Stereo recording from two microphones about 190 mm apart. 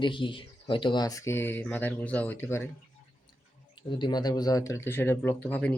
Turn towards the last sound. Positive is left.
turn(degrees=10)  # may be behind; listen again after turning